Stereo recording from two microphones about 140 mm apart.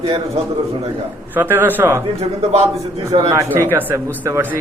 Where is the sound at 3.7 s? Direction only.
15° right (ahead or behind).